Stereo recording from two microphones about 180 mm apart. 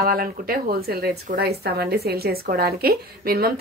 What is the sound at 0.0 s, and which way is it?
Speech, 55° right (ahead or behind).